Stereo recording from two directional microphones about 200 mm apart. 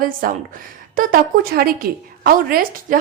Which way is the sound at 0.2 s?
45° right (ahead or behind).